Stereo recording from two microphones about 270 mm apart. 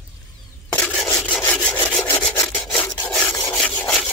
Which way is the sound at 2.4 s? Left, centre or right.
Centre.